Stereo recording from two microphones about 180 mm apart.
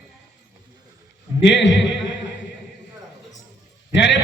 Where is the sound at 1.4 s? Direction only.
90° left.